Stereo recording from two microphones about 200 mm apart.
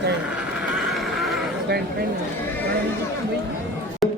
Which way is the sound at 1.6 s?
50° right (ahead or behind).